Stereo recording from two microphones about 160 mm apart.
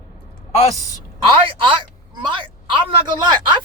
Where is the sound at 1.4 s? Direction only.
30° right (ahead or behind).